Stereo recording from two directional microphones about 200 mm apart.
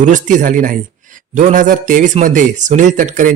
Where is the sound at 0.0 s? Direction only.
40° right (ahead or behind).